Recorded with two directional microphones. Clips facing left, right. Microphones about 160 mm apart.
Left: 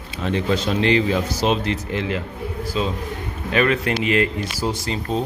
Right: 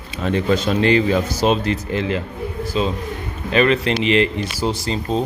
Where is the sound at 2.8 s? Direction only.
20° right (ahead or behind).